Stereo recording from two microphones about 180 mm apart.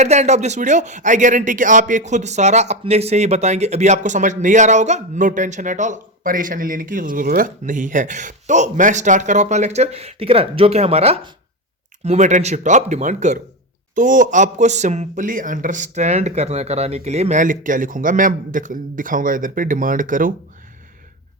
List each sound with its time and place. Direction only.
0.0 s speech: 40° right (ahead or behind)